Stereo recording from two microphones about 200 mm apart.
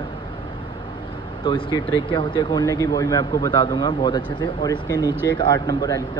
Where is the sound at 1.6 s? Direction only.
25° left (ahead or behind).